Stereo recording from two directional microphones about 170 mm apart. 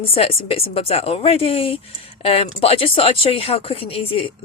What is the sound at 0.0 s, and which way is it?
Speech, 35° left (ahead or behind).